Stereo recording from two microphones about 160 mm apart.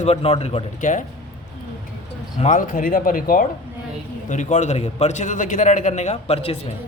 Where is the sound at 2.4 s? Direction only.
50° left (ahead or behind).